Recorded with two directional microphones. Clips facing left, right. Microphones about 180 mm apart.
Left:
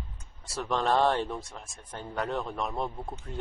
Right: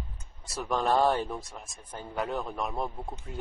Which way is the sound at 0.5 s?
5° right (ahead or behind).